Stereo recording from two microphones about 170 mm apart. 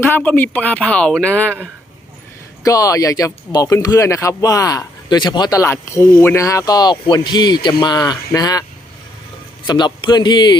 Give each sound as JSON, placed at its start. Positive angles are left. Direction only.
{"t": 0.0, "sound": "speech", "side_deg": 10}
{"t": 2.6, "sound": "speech", "side_deg": 20}
{"t": 9.6, "sound": "speech", "side_deg": 25}